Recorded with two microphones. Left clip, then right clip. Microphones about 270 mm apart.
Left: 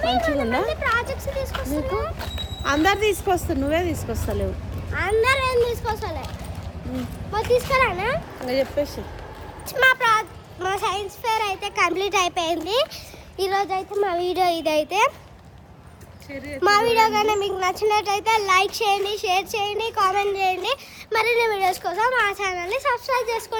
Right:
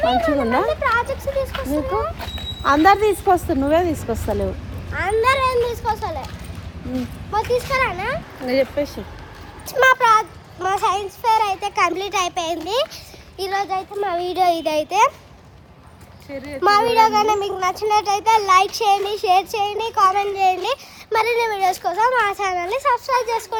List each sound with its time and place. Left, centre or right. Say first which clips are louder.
0.0 s a child's voice: right 4 dB; centre
3.2 s speech: right 5 dB; centre
4.9 s a child's voice: right 2 dB; centre
7.4 s speech: left 2 dB; centre
8.4 s speech: right 4 dB; right
9.6 s a child's voice: right 4 dB; centre
16.6 s a child's voice: right 3 dB; centre